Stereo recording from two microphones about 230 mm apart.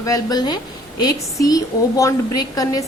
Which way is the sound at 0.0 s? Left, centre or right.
Centre.